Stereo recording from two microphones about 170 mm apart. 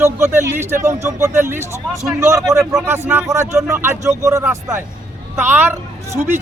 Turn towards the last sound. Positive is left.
turn(degrees=-15)  # may be behind; listen again after turning